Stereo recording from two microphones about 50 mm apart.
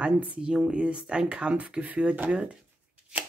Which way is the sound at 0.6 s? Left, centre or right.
Right.